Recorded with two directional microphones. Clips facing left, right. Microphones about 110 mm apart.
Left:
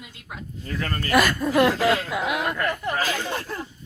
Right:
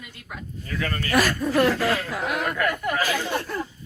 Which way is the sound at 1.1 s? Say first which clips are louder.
Left 2 dB; centre (ahead or behind).